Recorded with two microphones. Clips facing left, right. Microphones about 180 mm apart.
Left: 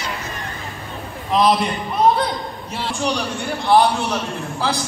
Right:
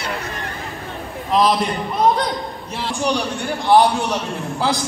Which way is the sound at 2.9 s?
15° right (ahead or behind).